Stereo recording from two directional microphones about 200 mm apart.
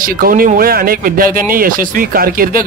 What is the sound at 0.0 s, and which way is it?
Speech, 45° right (ahead or behind).